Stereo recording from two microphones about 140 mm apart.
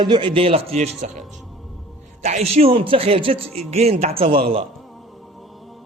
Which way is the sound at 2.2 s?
50° right (ahead or behind).